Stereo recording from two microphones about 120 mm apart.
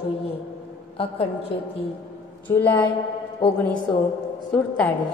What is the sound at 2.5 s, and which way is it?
Speech, 15° left (ahead or behind).